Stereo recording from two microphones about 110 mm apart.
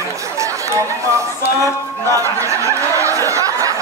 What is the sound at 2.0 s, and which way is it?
Snicker, 30° right (ahead or behind).